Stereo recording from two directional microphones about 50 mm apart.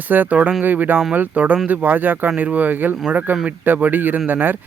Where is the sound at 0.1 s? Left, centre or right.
Right.